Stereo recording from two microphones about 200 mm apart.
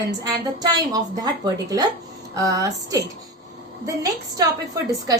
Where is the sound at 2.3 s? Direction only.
15° right (ahead or behind).